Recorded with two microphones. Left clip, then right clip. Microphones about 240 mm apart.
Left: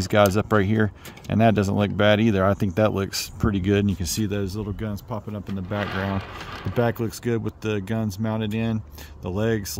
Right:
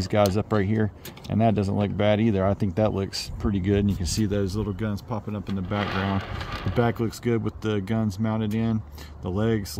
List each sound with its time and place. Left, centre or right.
0.0 s speech: centre